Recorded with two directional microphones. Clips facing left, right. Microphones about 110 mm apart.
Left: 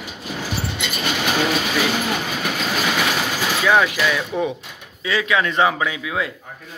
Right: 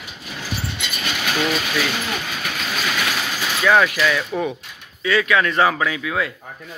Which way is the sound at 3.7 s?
15° left (ahead or behind).